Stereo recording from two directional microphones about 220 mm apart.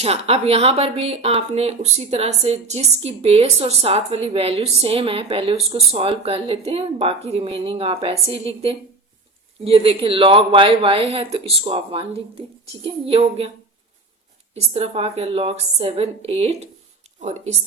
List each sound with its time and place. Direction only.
0.0 s speech: 30° right (ahead or behind)
14.5 s speech: 30° right (ahead or behind)